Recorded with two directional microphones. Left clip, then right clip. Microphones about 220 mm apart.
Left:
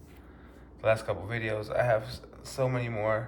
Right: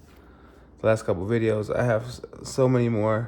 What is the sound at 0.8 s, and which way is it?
Speech, 25° right (ahead or behind).